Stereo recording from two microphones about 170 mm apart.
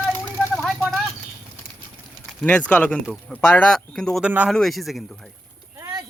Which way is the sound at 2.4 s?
10° left (ahead or behind).